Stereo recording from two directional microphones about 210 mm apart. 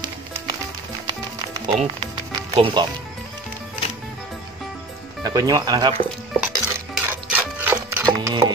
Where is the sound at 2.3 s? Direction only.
25° right (ahead or behind).